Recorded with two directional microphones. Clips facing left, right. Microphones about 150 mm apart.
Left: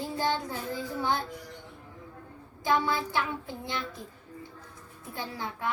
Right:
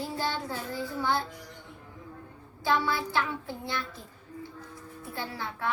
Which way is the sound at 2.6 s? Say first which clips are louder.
Left 1 dB; 15° left (ahead or behind).